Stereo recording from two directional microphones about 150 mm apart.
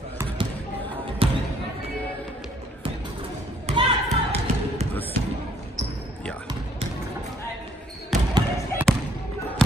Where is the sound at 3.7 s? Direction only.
35° right (ahead or behind).